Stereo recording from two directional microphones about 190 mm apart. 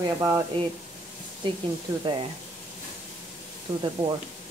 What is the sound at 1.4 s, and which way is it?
Speech, 25° right (ahead or behind).